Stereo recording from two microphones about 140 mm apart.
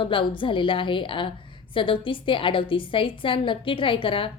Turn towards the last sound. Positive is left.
turn(degrees=40)  # may be behind; listen again after turning